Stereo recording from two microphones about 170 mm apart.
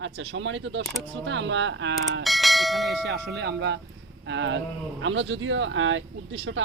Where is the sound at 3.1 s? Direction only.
75° right (ahead or behind).